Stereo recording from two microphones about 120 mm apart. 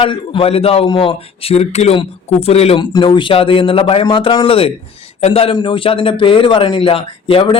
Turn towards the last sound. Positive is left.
turn(degrees=50)  # may be behind; listen again after turning